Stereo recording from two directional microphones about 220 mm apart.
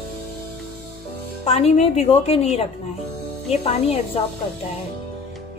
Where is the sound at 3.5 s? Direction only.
25° left (ahead or behind).